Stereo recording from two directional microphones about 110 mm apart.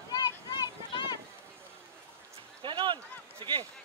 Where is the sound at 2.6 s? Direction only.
45° right (ahead or behind).